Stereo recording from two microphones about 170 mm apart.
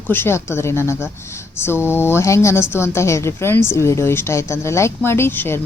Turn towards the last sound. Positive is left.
turn(degrees=15)  # may be behind; listen again after turning